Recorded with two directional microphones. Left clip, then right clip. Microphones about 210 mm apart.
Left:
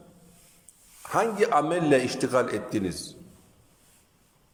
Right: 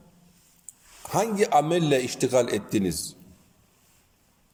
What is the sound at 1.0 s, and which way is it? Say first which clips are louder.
A man's voice: even; 20° right (ahead or behind).